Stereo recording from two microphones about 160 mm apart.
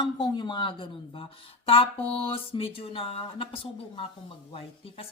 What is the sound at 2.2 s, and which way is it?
Speech, 35° left (ahead or behind).